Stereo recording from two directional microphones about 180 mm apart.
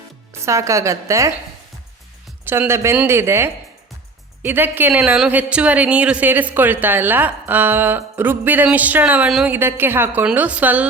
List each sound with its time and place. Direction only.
0.3 s a woman's voice: 15° right (ahead or behind)
2.4 s a woman's voice: 10° right (ahead or behind)